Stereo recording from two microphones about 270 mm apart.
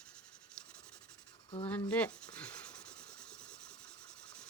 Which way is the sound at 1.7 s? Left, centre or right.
Centre.